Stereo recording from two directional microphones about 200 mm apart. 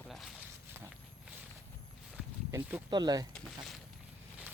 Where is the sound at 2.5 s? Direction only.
20° right (ahead or behind).